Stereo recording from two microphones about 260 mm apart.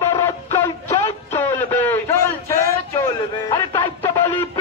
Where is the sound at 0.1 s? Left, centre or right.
Centre.